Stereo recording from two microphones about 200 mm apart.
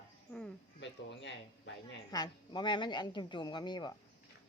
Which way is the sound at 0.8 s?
60° left (ahead or behind).